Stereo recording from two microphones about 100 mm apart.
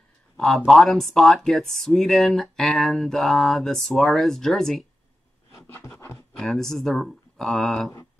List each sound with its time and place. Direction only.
0.7 s speech: centre (ahead or behind)
5.5 s a sound: 30° left (ahead or behind)
6.1 s speech: centre (ahead or behind)